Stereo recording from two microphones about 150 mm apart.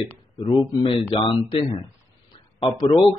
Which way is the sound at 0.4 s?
35° left (ahead or behind).